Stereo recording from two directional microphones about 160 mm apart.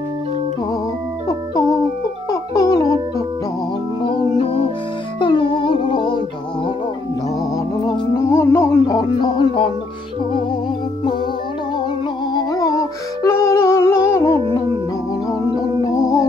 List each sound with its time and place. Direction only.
2.5 s music: 20° left (ahead or behind)
4.0 s music: 35° left (ahead or behind)
8.1 s music: 15° left (ahead or behind)
12.4 s music: 20° left (ahead or behind)
16.0 s music: 20° left (ahead or behind)